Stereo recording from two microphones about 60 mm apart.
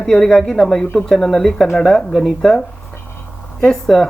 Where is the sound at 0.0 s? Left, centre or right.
Centre.